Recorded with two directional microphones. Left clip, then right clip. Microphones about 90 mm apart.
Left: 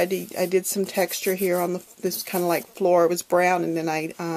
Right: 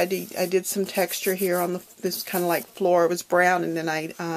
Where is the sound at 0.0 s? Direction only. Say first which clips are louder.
Left 1 dB; 40° left (ahead or behind).